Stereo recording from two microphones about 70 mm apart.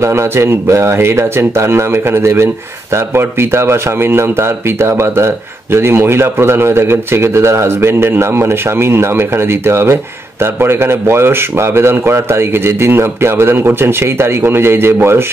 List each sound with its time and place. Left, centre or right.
0.0 s speech: right